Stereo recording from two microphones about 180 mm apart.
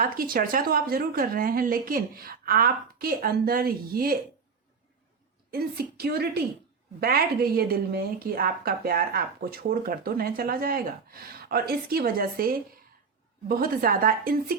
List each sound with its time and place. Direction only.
0.0 s a woman's voice: 55° right (ahead or behind)
5.5 s a woman's voice: 60° right (ahead or behind)